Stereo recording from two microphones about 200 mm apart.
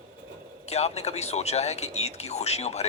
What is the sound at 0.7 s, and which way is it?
Speech, 30° left (ahead or behind).